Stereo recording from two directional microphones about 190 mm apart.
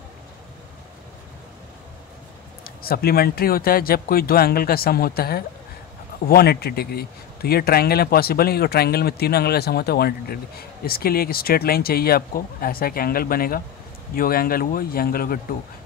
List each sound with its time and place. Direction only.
2.6 s a man's voice: 55° left (ahead or behind)